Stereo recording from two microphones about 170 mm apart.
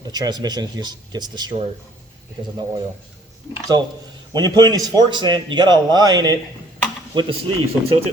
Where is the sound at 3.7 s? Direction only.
25° right (ahead or behind).